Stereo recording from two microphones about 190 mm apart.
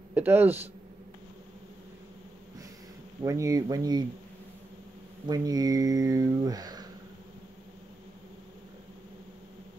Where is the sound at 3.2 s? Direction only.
15° right (ahead or behind).